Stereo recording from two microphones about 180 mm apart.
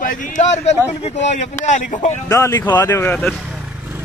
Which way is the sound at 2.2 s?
15° left (ahead or behind).